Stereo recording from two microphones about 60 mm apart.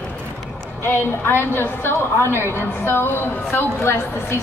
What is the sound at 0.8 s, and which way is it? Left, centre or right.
A woman's voice, left.